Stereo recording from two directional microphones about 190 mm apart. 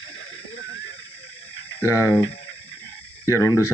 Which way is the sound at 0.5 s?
80° left.